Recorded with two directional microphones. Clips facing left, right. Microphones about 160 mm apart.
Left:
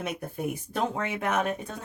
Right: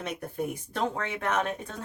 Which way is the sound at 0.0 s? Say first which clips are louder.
Left 1 dB; 5° left (ahead or behind).